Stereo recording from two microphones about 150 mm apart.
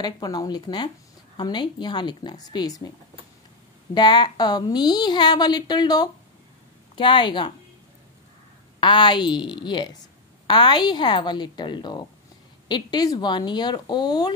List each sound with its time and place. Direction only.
0.0 s a woman's voice: 25° left (ahead or behind)
3.9 s a woman's voice: 30° left (ahead or behind)
8.7 s a woman's voice: 30° left (ahead or behind)